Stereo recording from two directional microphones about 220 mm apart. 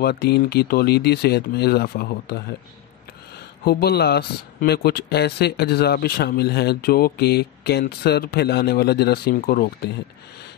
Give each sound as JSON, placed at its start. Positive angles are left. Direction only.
{"t": 0.0, "sound": "a man's voice", "side_deg": 45}
{"t": 3.6, "sound": "a man's voice", "side_deg": 45}